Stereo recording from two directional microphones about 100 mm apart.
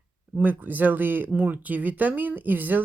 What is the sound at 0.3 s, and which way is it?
Speech, 15° right (ahead or behind).